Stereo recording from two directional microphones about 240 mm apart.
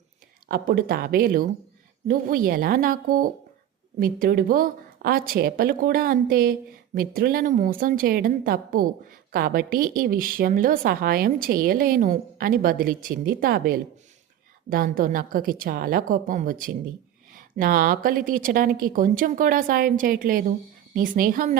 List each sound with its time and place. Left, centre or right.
0.4 s speech: right